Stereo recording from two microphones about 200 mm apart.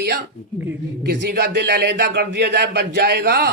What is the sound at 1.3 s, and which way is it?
Speech, 55° right (ahead or behind).